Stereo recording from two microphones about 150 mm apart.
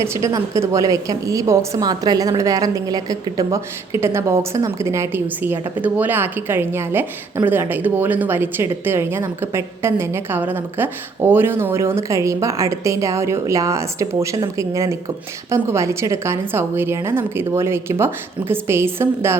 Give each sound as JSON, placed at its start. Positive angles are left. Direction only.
{"t": 0.0, "sound": "a woman's voice", "side_deg": -20}